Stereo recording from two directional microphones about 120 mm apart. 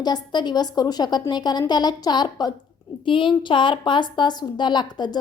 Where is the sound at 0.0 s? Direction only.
35° left (ahead or behind).